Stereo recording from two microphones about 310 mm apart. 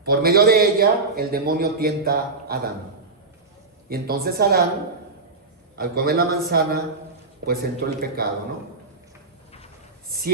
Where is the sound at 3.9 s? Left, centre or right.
Right.